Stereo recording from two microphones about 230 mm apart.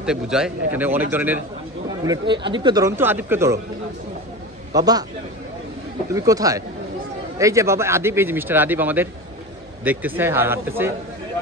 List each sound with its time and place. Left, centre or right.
0.0 s speech: centre
2.0 s speech: right
4.7 s speech: centre
6.1 s speech: centre